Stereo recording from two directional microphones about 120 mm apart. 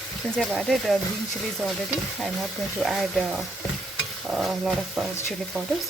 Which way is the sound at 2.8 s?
Centre (ahead or behind).